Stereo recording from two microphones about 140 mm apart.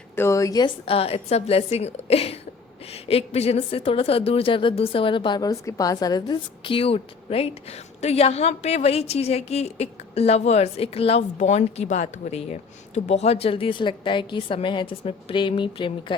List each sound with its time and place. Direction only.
0.2 s a woman's voice: 20° left (ahead or behind)
0.9 s a woman's voice: 45° left (ahead or behind)
11.3 s speech: 55° left (ahead or behind); by 16.1 s 35° left (ahead or behind)